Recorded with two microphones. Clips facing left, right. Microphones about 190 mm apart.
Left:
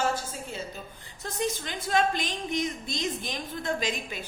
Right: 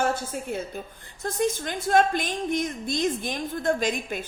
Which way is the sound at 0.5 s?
60° right (ahead or behind).